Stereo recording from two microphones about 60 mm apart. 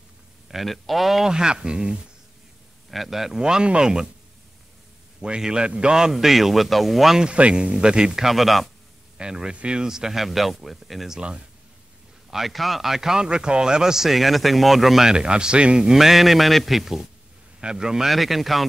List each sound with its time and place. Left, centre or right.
0.5 s a man's voice: centre
2.9 s a man's voice: centre
5.2 s a man's voice: centre
7.2 s a man's voice: centre
8.3 s a man's voice: centre
9.2 s a man's voice: centre
11.1 s a man's voice: centre
12.3 s a man's voice: centre
16.0 s a man's voice: centre